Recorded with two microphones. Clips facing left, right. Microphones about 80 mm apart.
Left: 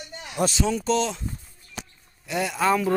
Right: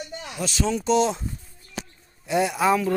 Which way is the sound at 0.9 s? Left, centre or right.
Centre.